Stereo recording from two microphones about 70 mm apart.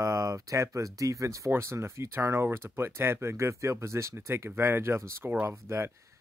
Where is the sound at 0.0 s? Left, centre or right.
Right.